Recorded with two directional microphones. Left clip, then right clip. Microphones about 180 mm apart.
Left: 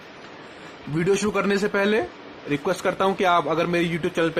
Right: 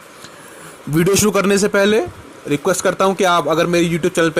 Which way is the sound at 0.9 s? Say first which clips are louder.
Right 7 dB; 45° right (ahead or behind).